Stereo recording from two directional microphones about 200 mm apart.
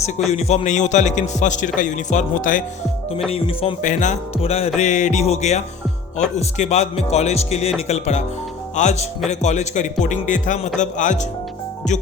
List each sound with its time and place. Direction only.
0.3 s speech: 35° left (ahead or behind)
3.2 s speech: 30° left (ahead or behind)
3.8 s speech: 40° left (ahead or behind)